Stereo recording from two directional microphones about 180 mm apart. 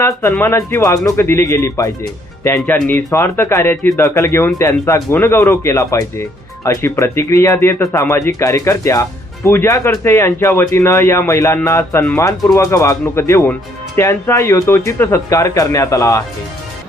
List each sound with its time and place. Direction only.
0.0 s speech: 15° left (ahead or behind)